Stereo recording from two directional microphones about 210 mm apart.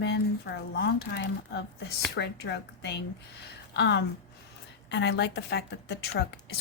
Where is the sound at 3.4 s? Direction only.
50° left (ahead or behind).